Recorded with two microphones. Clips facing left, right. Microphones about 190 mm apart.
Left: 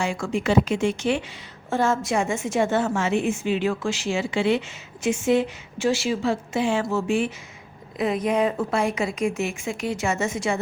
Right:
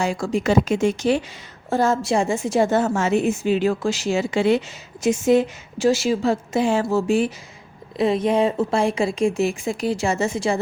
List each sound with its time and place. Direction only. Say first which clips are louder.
0.0 s a woman's voice: right 3 dB; 40° right (ahead or behind)